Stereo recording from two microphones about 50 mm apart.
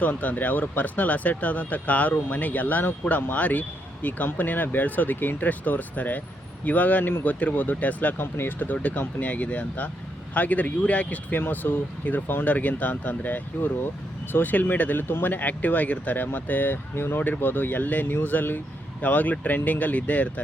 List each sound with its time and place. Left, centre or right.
0.0 s speech: left
17.4 s speech: left